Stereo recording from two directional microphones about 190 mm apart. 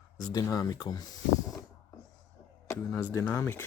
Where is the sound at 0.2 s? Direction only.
20° left (ahead or behind).